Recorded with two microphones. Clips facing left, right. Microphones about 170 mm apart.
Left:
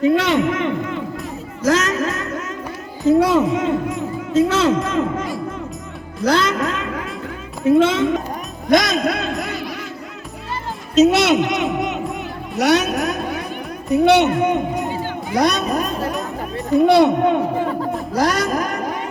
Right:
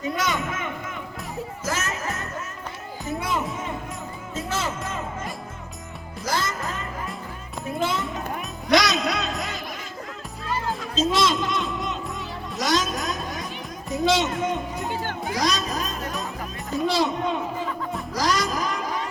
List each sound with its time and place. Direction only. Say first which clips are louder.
0.1 s a man's voice: left 11 dB; 65° left (ahead or behind)
1.6 s music: left 13 dB; 75° left (ahead or behind)
3.1 s speech: left 14 dB; 75° left (ahead or behind)
4.4 s a sound: left 14 dB; 75° left (ahead or behind)
6.2 s music: left 10 dB; 70° left (ahead or behind)
8.6 s music: left 5 dB; 50° left (ahead or behind)
10.9 s a sound: left 10 dB; 70° left (ahead or behind)
12.1 s vehicle: left 7 dB; 65° left (ahead or behind)
13.9 s a sound: left 9 dB; 65° left (ahead or behind)